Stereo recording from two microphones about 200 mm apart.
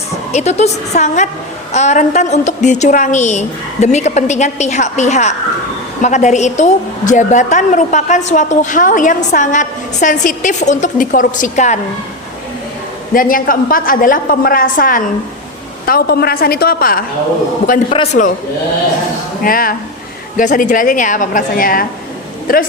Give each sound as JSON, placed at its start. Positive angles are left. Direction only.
{"t": 0.3, "sound": "a woman's voice", "side_deg": 35}
{"t": 13.1, "sound": "a woman's voice", "side_deg": 45}
{"t": 17.9, "sound": "a woman's voice", "side_deg": 35}
{"t": 19.4, "sound": "a woman's voice", "side_deg": 45}